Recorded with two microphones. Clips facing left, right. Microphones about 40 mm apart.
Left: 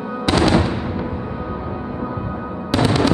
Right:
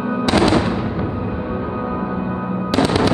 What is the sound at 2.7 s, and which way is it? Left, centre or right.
Fireworks, centre.